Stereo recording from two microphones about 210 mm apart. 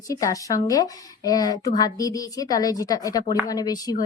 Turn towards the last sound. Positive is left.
turn(degrees=20)  # may be behind; listen again after turning